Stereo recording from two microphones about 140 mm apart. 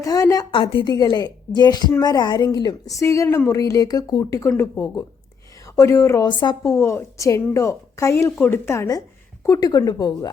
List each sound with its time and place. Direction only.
0.0 s a woman's voice: 25° left (ahead or behind)
0.5 s a woman's voice: 40° left (ahead or behind); by 6.2 s 20° left (ahead or behind)
6.4 s a woman's voice: 30° left (ahead or behind)
6.7 s a woman's voice: 20° left (ahead or behind)